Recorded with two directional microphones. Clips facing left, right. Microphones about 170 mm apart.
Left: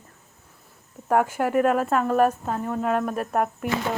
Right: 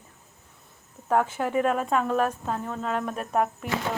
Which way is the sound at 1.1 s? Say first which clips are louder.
Left 3 dB; 10° left (ahead or behind).